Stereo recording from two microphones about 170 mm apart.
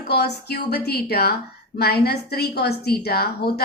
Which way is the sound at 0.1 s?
70° left (ahead or behind).